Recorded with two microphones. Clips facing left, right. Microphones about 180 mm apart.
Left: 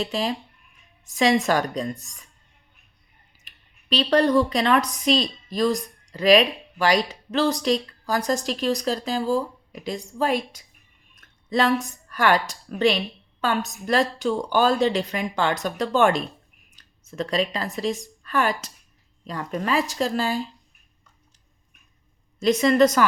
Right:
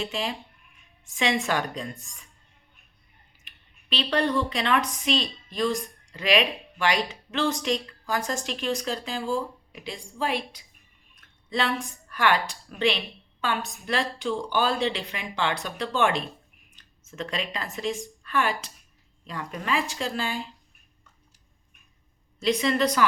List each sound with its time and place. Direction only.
0.0 s a woman's voice: 35° left (ahead or behind)
3.4 s a woman's voice: 40° left (ahead or behind)
22.4 s a woman's voice: 45° left (ahead or behind)